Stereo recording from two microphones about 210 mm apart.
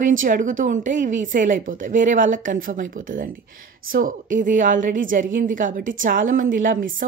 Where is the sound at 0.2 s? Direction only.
40° right (ahead or behind).